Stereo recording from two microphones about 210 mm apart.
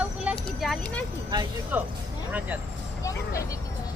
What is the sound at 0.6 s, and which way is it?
Speech, centre (ahead or behind).